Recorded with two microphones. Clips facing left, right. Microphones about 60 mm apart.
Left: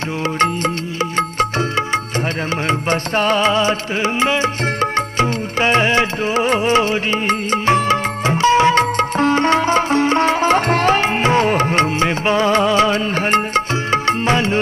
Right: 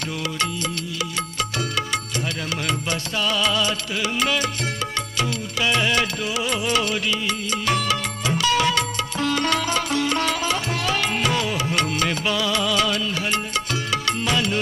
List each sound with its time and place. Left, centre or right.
2.9 s music: left